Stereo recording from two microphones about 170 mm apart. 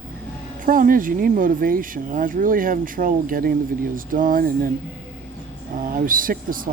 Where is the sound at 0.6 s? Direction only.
55° right (ahead or behind).